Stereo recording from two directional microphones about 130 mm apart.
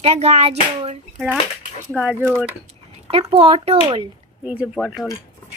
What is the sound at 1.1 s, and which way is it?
Speech, 5° right (ahead or behind).